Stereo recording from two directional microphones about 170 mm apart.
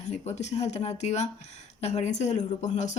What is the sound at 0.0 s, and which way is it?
Speech, 40° left (ahead or behind).